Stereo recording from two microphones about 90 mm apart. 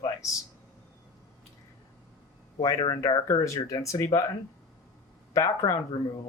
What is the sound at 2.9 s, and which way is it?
Speech, 45° left (ahead or behind).